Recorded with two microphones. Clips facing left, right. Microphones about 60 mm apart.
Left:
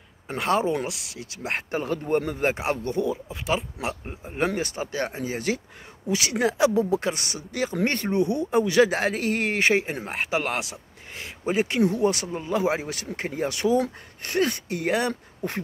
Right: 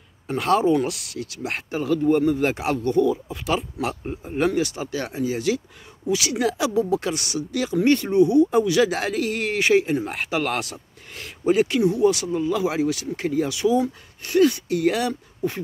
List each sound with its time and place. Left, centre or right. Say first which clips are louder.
0.3 s speech: right 4 dB; left
4.5 s speech: right 5 dB; left
15.4 s speech: right 5 dB; left